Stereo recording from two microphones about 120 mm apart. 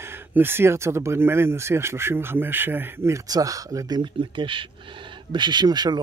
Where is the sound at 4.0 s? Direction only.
45° right (ahead or behind).